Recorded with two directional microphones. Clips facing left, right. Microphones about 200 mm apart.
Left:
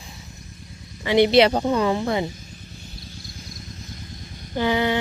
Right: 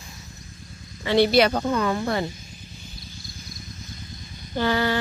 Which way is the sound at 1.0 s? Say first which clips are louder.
Left 2 dB; 15° left (ahead or behind).